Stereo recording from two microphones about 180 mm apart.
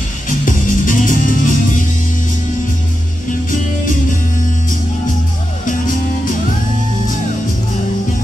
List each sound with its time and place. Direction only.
0.5 s music: 45° left (ahead or behind)